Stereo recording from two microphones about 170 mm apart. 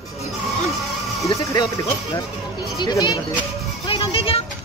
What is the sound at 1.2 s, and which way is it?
Speech, 20° left (ahead or behind).